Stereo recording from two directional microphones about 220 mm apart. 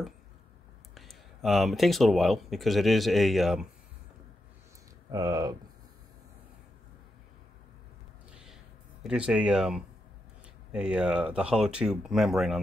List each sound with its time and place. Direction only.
0.9 s speech: centre (ahead or behind)
5.1 s speech: 15° right (ahead or behind)
9.0 s speech: 5° right (ahead or behind)